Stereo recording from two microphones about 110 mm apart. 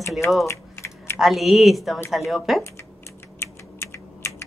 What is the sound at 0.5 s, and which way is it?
Typing, 25° left (ahead or behind).